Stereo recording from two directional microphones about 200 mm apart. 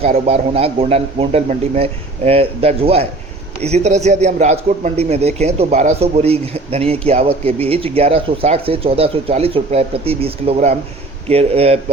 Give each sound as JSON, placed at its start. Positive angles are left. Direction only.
{"t": 0.3, "sound": "a man's voice", "side_deg": -30}